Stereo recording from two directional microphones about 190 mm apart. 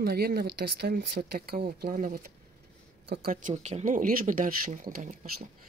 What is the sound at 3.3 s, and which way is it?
Speech, 40° right (ahead or behind).